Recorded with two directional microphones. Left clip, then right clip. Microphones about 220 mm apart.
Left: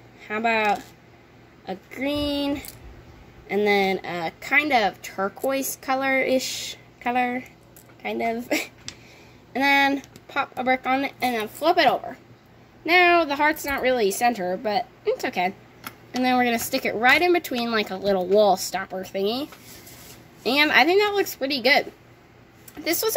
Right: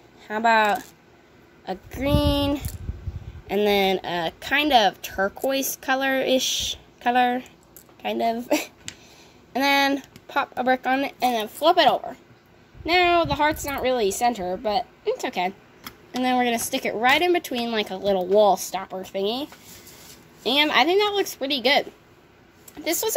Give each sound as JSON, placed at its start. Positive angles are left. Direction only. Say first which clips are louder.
{"t": 0.4, "sound": "a woman's voice", "louder": "right 3 dB", "side_deg": -25}
{"t": 20.5, "sound": "a woman's voice", "louder": "left 1 dB", "side_deg": -5}